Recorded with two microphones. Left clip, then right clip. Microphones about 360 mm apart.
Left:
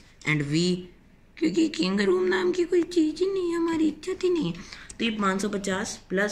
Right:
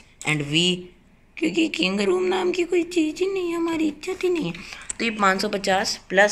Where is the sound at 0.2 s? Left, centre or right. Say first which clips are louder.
Right 4 dB; centre.